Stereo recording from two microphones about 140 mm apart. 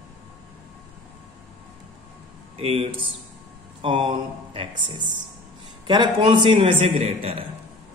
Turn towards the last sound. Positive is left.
turn(degrees=-45)  # may be behind; listen again after turning